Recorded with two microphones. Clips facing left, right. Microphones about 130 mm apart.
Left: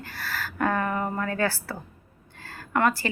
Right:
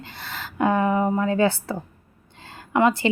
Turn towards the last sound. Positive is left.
turn(degrees=-20)  # may be behind; listen again after turning